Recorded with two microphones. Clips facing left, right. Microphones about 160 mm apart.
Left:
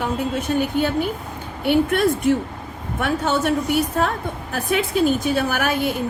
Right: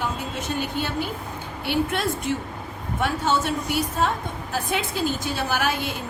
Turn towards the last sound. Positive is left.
turn(degrees=55)  # may be behind; listen again after turning